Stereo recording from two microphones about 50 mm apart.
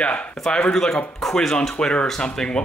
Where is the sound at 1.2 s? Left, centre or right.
Centre.